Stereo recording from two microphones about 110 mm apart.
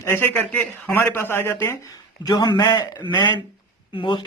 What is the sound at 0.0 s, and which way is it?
A man's voice, 20° left (ahead or behind).